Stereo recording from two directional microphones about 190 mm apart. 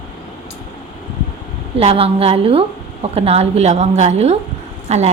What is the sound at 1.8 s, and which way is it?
A woman's voice, 30° right (ahead or behind).